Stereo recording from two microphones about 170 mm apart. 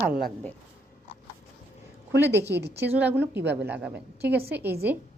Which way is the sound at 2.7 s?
10° right (ahead or behind).